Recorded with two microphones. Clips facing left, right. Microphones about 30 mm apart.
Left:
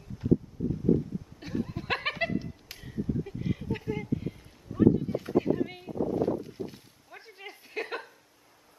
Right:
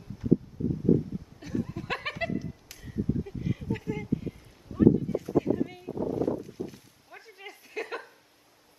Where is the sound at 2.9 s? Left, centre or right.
Centre.